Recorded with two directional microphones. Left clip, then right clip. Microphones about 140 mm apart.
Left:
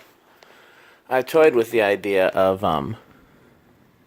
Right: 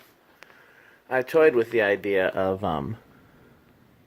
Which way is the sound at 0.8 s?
25° left (ahead or behind).